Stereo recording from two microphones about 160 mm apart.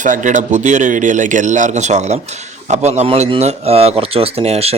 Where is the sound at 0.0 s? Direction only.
50° right (ahead or behind).